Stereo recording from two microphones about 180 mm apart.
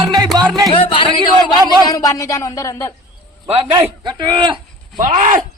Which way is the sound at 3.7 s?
25° right (ahead or behind).